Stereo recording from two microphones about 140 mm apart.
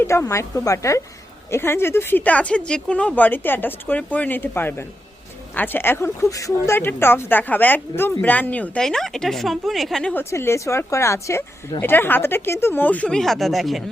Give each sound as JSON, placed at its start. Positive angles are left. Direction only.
{"t": 0.0, "sound": "a woman's voice", "side_deg": 20}
{"t": 10.2, "sound": "a woman's voice", "side_deg": 20}